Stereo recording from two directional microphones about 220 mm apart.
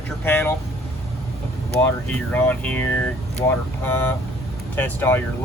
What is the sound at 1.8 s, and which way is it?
Speech, 10° left (ahead or behind).